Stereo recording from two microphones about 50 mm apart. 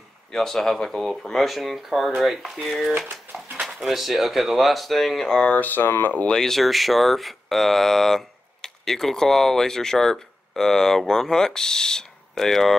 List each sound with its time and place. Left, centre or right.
0.3 s speech: centre
5.5 s speech: left
6.2 s speech: centre